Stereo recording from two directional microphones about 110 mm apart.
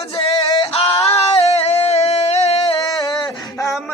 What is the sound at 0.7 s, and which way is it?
Yodeling, 60° left (ahead or behind).